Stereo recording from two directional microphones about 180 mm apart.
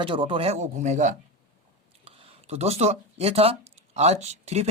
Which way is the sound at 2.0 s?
35° right (ahead or behind).